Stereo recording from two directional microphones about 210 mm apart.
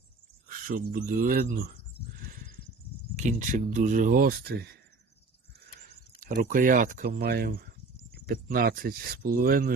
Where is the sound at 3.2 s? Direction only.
35° right (ahead or behind).